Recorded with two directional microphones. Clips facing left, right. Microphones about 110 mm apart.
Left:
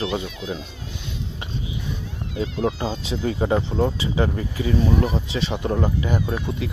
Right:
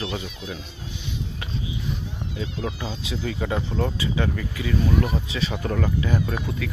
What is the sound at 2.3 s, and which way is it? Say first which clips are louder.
Speech: left 7 dB; 35° left (ahead or behind).